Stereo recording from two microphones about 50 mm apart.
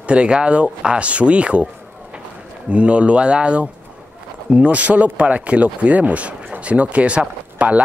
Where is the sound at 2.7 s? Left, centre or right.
Right.